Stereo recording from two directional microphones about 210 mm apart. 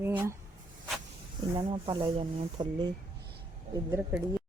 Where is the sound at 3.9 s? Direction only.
5° right (ahead or behind).